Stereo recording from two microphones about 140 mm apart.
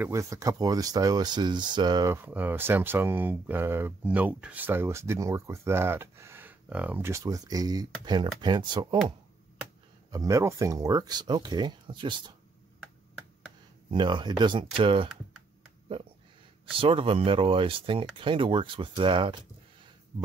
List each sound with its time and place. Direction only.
0.0 s speech: 20° right (ahead or behind)
2.2 s speech: 15° right (ahead or behind); by 8.8 s 30° right (ahead or behind)
10.1 s speech: 20° right (ahead or behind)
13.8 s speech: 35° right (ahead or behind)
16.7 s speech: 40° right (ahead or behind)